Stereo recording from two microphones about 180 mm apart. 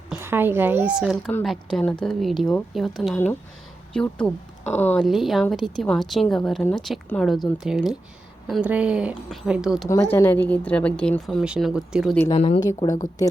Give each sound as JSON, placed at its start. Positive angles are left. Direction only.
{"t": 0.1, "sound": "a woman's voice", "side_deg": -10}
{"t": 5.0, "sound": "speech", "side_deg": 0}
{"t": 9.9, "sound": "a woman's voice", "side_deg": 15}
{"t": 12.3, "sound": "speech", "side_deg": 35}
{"t": 12.5, "sound": "speech", "side_deg": 20}